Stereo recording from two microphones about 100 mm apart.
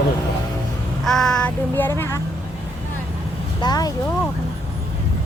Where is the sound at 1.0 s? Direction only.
5° left (ahead or behind).